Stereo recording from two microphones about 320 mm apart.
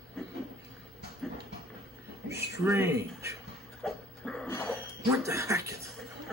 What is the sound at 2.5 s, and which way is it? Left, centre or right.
Speech, centre.